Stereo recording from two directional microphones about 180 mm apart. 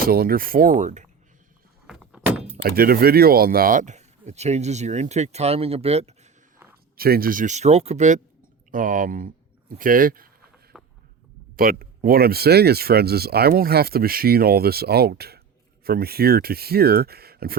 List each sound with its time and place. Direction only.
0.1 s speech: 55° right (ahead or behind)
1.9 s door: 5° right (ahead or behind)
2.6 s speech: 55° right (ahead or behind); by 6.1 s 35° right (ahead or behind)
6.9 s a man's voice: 55° right (ahead or behind)
10.7 s a sound: centre (ahead or behind)
11.5 s speech: 55° right (ahead or behind)